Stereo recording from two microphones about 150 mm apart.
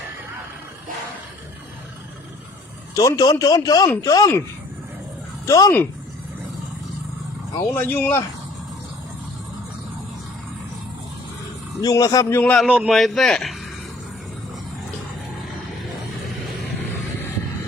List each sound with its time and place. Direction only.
2.9 s speech: 25° left (ahead or behind)
5.5 s speech: 25° left (ahead or behind)
7.7 s speech: 15° left (ahead or behind)
11.8 s speech: 25° left (ahead or behind)
12.5 s a man's voice: 5° right (ahead or behind)